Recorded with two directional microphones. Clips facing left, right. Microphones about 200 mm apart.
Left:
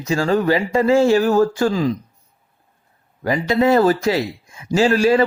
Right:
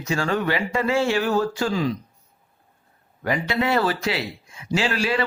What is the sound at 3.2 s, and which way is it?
Speech, 35° left (ahead or behind).